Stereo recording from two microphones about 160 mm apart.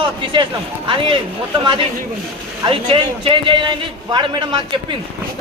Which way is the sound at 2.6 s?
35° right (ahead or behind).